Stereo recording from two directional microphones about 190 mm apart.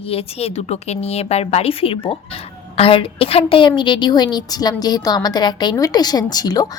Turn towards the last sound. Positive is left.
turn(degrees=20)  # may be behind; listen again after turning